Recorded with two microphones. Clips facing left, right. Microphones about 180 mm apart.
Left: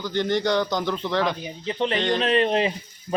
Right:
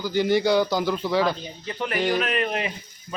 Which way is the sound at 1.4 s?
20° left (ahead or behind).